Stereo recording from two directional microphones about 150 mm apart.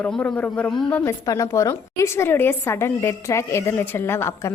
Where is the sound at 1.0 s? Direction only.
20° left (ahead or behind).